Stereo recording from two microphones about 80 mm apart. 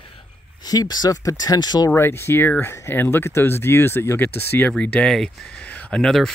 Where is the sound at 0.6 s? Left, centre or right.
Left.